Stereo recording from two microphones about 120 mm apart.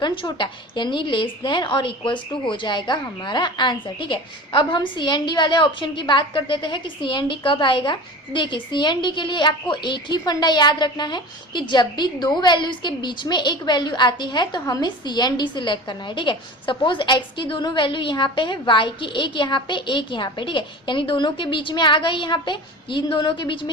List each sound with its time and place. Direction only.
0.0 s a woman's voice: 40° left (ahead or behind)